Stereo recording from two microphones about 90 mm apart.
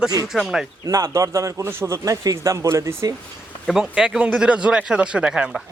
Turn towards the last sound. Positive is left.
turn(degrees=-10)  # may be behind; listen again after turning